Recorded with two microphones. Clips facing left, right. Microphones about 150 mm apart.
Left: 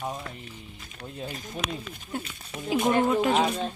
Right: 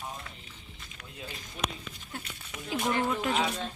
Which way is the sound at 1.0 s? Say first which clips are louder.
Left 8 dB; 40° left (ahead or behind).